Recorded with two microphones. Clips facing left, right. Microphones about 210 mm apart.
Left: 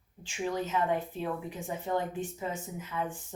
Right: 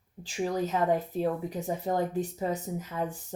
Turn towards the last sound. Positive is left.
turn(degrees=-40)  # may be behind; listen again after turning